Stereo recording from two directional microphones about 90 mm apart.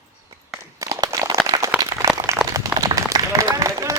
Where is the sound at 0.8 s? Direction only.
35° right (ahead or behind).